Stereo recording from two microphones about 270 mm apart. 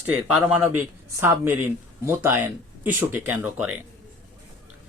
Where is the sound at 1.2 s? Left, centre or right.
Centre.